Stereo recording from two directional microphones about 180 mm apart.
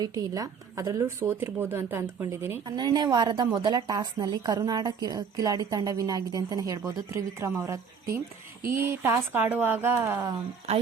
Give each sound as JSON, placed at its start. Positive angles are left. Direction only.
{"t": 0.0, "sound": "a woman's voice", "side_deg": -20}